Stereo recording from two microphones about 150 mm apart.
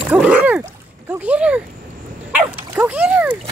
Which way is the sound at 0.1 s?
10° right (ahead or behind).